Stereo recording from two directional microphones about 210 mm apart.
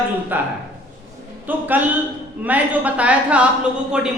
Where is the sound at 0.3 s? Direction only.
10° right (ahead or behind).